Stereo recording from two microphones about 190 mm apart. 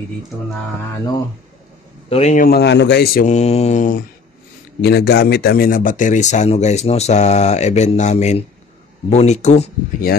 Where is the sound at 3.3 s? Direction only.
35° left (ahead or behind).